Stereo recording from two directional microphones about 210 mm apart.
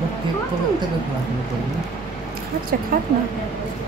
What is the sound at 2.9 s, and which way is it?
Speech, 40° right (ahead or behind).